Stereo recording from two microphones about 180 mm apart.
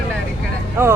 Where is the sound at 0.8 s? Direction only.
15° right (ahead or behind).